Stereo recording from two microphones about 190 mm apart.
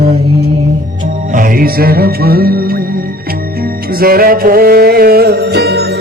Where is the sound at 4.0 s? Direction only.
50° right (ahead or behind).